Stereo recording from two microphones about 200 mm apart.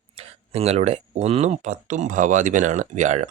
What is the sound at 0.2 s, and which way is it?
Speech, 30° right (ahead or behind).